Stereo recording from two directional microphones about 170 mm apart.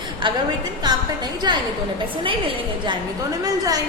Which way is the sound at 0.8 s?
25° right (ahead or behind).